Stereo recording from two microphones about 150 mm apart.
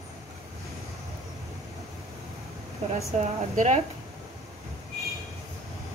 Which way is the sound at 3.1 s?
55° right (ahead or behind).